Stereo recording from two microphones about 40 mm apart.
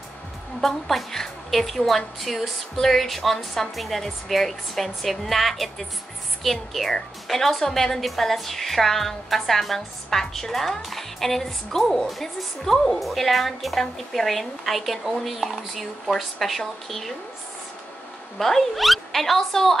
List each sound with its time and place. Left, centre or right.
0.6 s a woman's voice: centre
18.4 s speech: centre